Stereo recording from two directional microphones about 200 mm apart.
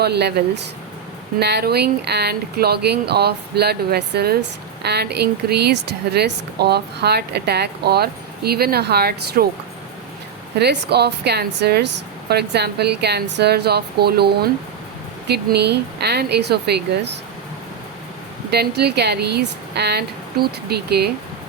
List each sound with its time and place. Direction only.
0.0 s speech: 55° right (ahead or behind)
10.6 s speech: 55° right (ahead or behind)
18.5 s speech: 55° right (ahead or behind)